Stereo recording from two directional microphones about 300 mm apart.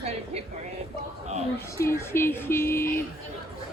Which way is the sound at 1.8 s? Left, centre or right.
Centre.